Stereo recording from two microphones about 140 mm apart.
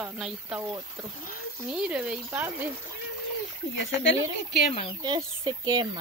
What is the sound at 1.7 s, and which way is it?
Speech, 5° right (ahead or behind).